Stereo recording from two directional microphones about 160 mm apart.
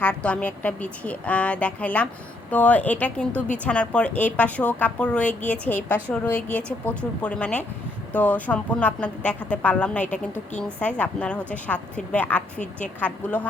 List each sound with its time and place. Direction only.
0.0 s a woman's voice: 5° left (ahead or behind)